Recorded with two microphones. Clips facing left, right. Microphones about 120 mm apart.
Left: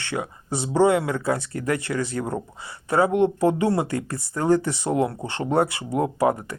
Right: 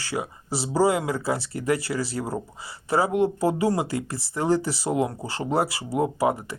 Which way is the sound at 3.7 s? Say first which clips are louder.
Left 2 dB; 30° right (ahead or behind).